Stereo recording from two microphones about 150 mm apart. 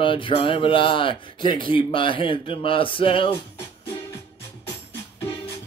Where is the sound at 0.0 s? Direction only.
35° left (ahead or behind).